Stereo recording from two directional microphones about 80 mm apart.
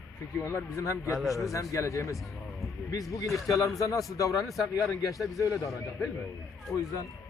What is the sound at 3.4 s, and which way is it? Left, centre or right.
Speech, left.